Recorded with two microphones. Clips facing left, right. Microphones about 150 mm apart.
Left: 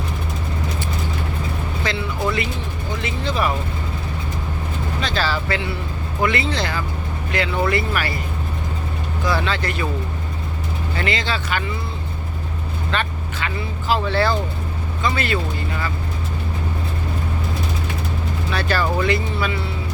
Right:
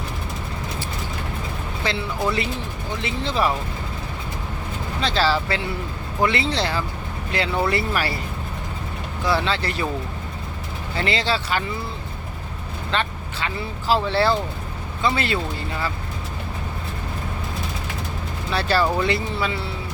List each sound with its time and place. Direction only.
1.8 s speech: 30° right (ahead or behind)
4.9 s speech: 30° right (ahead or behind)
9.2 s speech: 30° right (ahead or behind)
10.9 s speech: 30° right (ahead or behind)
12.9 s speech: 30° right (ahead or behind)
18.5 s speech: 30° right (ahead or behind)